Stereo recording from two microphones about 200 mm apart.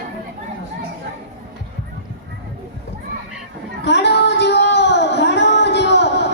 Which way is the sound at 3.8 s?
60° left (ahead or behind).